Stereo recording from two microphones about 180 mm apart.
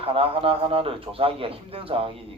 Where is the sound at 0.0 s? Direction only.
30° right (ahead or behind).